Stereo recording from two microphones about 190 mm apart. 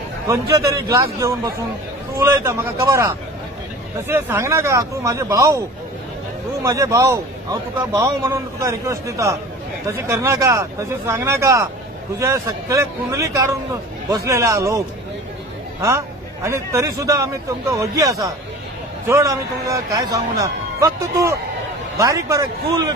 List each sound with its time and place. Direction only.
0.3 s a man's voice: 15° right (ahead or behind)
2.1 s a man's voice: 15° right (ahead or behind)
4.1 s a man's voice: 15° right (ahead or behind)
6.6 s a man's voice: 15° right (ahead or behind)
16.4 s a man's voice: 15° right (ahead or behind)